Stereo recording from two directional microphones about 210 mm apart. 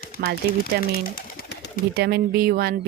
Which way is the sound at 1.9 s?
50° right (ahead or behind).